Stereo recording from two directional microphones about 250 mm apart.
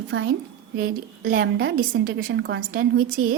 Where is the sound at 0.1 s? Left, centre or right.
Right.